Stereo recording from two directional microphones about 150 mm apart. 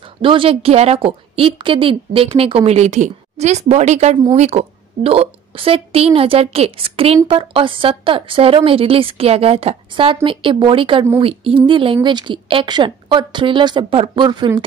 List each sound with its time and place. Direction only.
0.2 s a woman's voice: 35° right (ahead or behind)